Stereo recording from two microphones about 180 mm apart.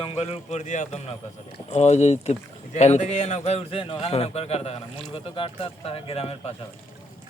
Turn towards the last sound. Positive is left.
turn(degrees=35)  # may be behind; listen again after turning